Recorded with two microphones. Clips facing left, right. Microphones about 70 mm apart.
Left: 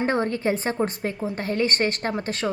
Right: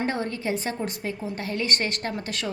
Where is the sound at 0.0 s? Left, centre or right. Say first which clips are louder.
Left 5 dB; left.